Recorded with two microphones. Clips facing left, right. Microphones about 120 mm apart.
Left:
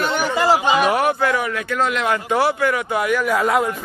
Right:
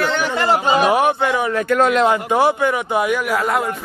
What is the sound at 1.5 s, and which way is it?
Speech, 45° right (ahead or behind).